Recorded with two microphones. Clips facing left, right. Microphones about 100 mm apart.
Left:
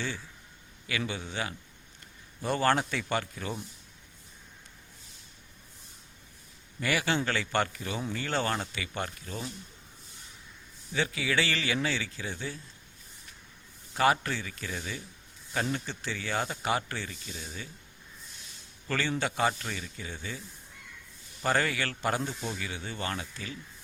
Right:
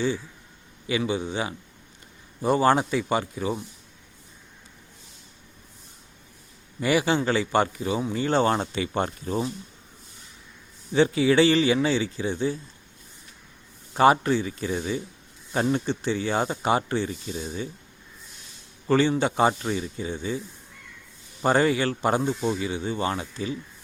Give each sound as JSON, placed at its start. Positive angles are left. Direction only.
{"t": 0.9, "sound": "a man's voice", "side_deg": -20}
{"t": 6.7, "sound": "a man's voice", "side_deg": -20}
{"t": 10.9, "sound": "speech", "side_deg": -30}
{"t": 13.9, "sound": "speech", "side_deg": -25}
{"t": 18.9, "sound": "speech", "side_deg": -20}
{"t": 21.4, "sound": "speech", "side_deg": -25}